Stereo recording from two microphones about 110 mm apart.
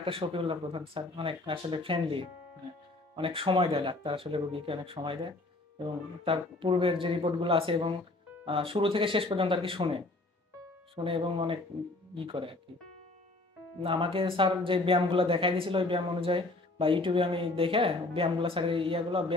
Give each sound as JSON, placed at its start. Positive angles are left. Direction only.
{"t": 0.0, "sound": "speech", "side_deg": -55}
{"t": 6.2, "sound": "speech", "side_deg": -55}
{"t": 11.1, "sound": "speech", "side_deg": -55}
{"t": 13.8, "sound": "speech", "side_deg": -55}